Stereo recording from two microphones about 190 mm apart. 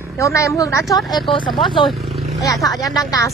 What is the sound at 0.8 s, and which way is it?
Speech, centre (ahead or behind).